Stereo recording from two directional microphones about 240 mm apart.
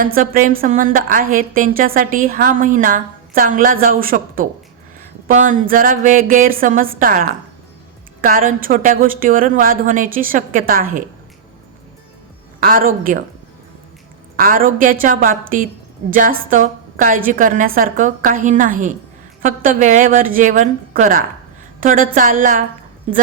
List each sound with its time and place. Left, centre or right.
0.0 s a woman's voice: right
12.5 s a woman's voice: right
14.3 s a woman's voice: right